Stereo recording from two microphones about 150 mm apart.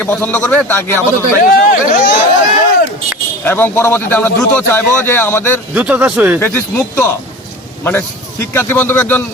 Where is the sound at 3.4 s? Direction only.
15° left (ahead or behind).